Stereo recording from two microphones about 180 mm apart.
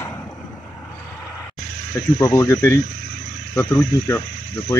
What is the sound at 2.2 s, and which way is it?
Speech, 15° left (ahead or behind).